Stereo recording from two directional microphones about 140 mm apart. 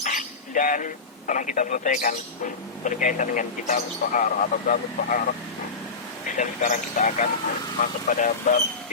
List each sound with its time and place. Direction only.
0.0 s a sound: 65° left (ahead or behind)
1.3 s speech: 65° left (ahead or behind)
6.3 s speech: 60° left (ahead or behind)